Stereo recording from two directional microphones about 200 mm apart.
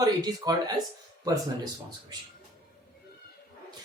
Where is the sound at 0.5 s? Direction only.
20° right (ahead or behind).